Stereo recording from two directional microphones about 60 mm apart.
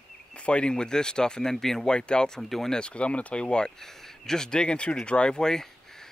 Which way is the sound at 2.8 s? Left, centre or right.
Centre.